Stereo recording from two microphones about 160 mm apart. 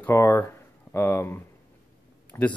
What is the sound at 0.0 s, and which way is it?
Speech, 15° left (ahead or behind).